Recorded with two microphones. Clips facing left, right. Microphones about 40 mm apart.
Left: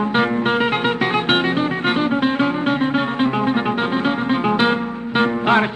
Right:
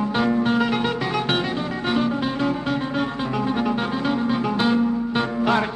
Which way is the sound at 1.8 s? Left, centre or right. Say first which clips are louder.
Left 2 dB; left.